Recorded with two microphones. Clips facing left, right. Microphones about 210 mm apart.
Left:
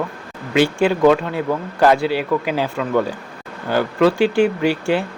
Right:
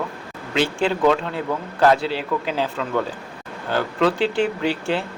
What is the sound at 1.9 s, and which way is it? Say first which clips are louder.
Speech: left 4 dB; 60° left (ahead or behind).